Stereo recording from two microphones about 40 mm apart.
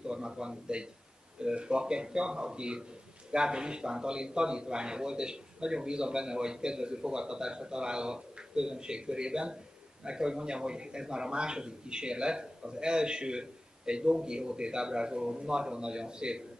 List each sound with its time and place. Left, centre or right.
0.0 s a man's voice: right